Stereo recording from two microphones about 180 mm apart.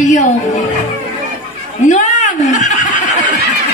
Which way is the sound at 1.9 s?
40° left (ahead or behind).